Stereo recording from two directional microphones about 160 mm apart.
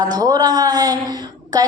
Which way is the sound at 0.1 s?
25° right (ahead or behind).